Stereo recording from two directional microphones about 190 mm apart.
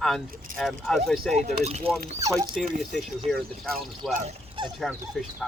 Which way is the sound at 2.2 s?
15° right (ahead or behind).